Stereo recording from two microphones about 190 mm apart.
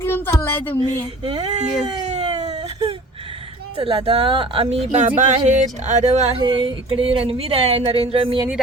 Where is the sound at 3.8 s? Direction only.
30° right (ahead or behind).